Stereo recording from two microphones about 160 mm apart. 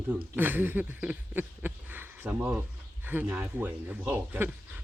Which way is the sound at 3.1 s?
10° right (ahead or behind).